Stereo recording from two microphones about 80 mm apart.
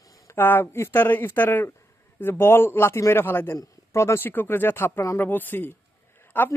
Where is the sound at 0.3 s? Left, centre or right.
Left.